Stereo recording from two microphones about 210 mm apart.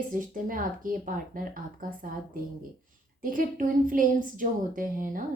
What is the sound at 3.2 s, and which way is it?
A woman's voice, 40° right (ahead or behind).